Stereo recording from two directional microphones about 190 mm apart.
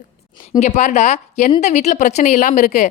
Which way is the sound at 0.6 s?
40° left (ahead or behind).